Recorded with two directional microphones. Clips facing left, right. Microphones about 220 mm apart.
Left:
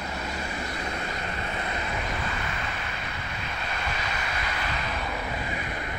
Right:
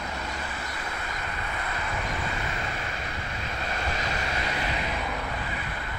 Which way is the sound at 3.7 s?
40° right (ahead or behind).